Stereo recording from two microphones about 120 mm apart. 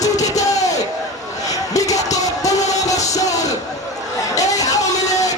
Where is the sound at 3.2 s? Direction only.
30° left (ahead or behind).